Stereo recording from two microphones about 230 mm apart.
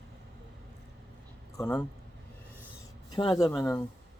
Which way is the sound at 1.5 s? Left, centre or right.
Centre.